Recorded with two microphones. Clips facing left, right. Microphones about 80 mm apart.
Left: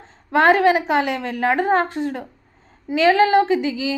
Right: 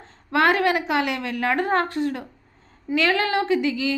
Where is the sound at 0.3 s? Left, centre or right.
Left.